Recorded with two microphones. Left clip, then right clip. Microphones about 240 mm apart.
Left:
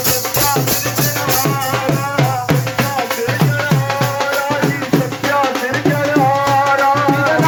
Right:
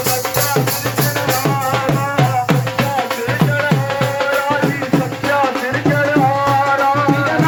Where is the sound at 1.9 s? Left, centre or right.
Centre.